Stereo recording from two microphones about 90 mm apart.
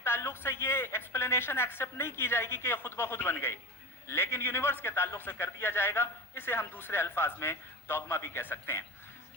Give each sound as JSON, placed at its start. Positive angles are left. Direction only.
{"t": 0.0, "sound": "speech", "side_deg": 25}